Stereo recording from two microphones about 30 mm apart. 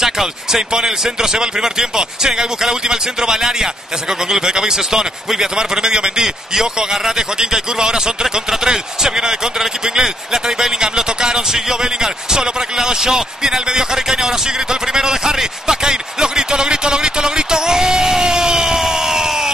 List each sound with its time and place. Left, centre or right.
0.0 s a man's voice: centre